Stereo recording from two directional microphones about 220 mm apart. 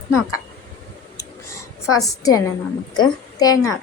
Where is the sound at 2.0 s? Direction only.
15° left (ahead or behind).